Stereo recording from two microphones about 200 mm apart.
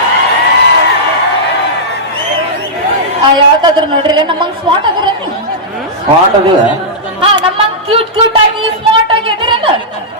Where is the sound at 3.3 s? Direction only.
20° right (ahead or behind).